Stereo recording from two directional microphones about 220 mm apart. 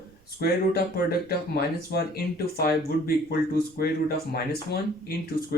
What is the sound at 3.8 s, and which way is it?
Speech, 45° left (ahead or behind).